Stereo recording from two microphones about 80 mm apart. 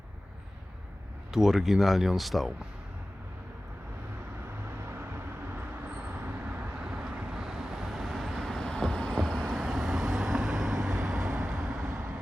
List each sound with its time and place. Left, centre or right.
1.3 s speech: centre
4.9 s vehicle: right; by 12.0 s centre